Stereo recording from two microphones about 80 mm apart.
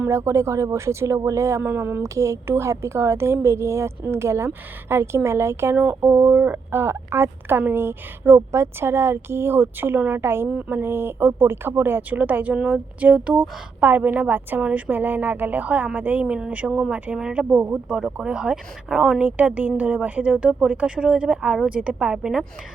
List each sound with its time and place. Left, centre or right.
0.0 s speech: right
17.9 s speech: centre
19.2 s speech: centre